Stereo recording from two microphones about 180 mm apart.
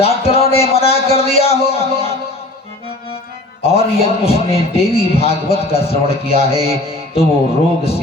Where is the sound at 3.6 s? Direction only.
35° left (ahead or behind).